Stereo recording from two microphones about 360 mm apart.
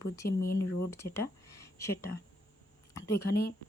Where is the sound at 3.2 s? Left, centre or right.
Left.